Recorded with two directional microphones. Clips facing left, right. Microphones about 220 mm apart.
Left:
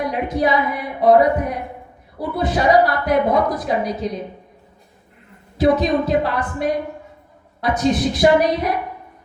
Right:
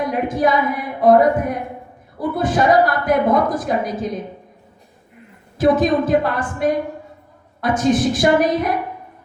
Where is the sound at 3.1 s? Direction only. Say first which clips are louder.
Right 1 dB; 50° right (ahead or behind).